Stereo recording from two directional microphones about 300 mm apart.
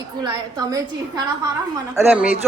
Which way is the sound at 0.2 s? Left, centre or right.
Centre.